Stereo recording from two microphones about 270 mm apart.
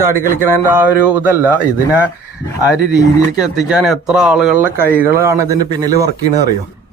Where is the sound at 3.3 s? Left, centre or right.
Centre.